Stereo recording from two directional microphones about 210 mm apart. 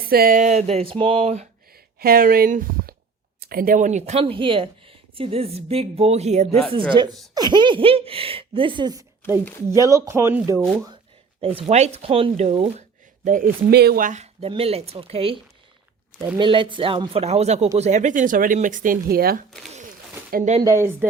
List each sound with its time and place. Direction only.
0.1 s speech: 45° right (ahead or behind)
1.7 s speech: 45° right (ahead or behind)
7.3 s speech: 20° right (ahead or behind)
11.3 s speech: 25° right (ahead or behind)
13.2 s speech: 40° right (ahead or behind)
16.4 s speech: 25° right (ahead or behind)
20.6 s speech: 15° right (ahead or behind)